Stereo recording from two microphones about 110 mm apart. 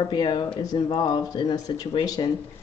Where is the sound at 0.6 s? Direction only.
35° left (ahead or behind).